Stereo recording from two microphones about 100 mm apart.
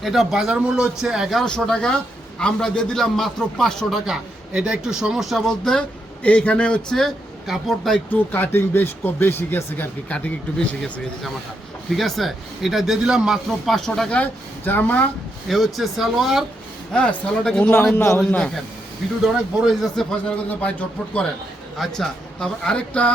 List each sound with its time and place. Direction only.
0.0 s a man's voice: centre (ahead or behind)
8.1 s speech: 20° left (ahead or behind)
11.9 s a man's voice: centre (ahead or behind)
15.4 s a man's voice: centre (ahead or behind)
16.9 s a man's voice: 10° left (ahead or behind)
17.9 s speech: 25° left (ahead or behind)
18.3 s a man's voice: 10° left (ahead or behind)
20.6 s a man's voice: 10° left (ahead or behind)